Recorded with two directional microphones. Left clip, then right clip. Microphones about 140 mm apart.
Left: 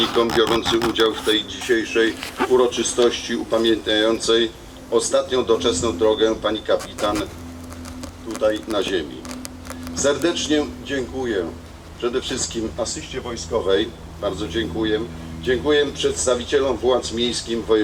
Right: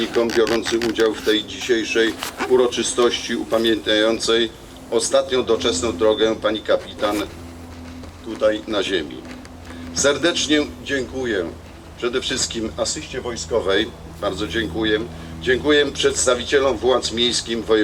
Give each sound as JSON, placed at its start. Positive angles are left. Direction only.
{"t": 0.3, "sound": "speech", "side_deg": 5}
{"t": 1.0, "sound": "speech", "side_deg": -30}
{"t": 8.4, "sound": "speech", "side_deg": -30}
{"t": 10.0, "sound": "speech", "side_deg": -40}